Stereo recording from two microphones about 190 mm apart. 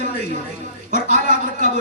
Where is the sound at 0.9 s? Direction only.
40° right (ahead or behind).